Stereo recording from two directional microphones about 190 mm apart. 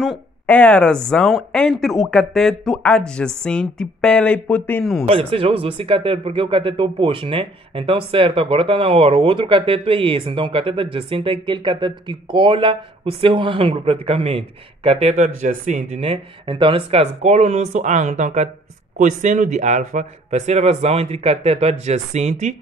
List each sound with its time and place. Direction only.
0.0 s speech: 5° left (ahead or behind)
5.0 s speech: 30° right (ahead or behind)